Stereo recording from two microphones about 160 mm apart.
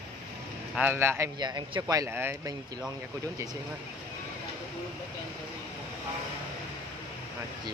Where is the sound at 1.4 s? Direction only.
25° right (ahead or behind).